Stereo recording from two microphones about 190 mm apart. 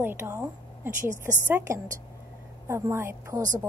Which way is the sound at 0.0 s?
10° right (ahead or behind).